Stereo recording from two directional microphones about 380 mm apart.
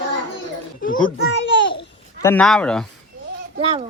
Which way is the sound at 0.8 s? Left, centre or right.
Left.